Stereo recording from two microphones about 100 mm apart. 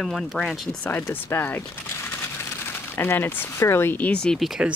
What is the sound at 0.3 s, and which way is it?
Speech, centre (ahead or behind).